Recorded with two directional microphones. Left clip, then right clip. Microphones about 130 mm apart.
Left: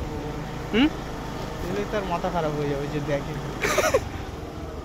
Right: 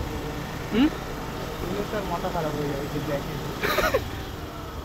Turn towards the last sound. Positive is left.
turn(degrees=20)  # may be behind; listen again after turning